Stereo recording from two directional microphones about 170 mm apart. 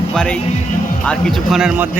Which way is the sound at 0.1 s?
5° left (ahead or behind).